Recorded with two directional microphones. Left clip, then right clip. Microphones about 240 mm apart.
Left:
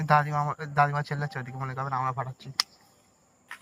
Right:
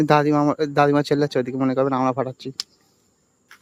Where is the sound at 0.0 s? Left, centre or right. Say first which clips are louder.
Right 7 dB; right.